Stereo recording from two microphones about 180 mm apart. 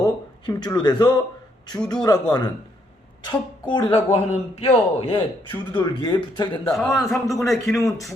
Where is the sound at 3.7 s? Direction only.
30° left (ahead or behind).